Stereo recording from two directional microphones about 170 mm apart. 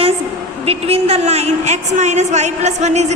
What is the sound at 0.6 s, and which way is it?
A woman's voice, 35° right (ahead or behind).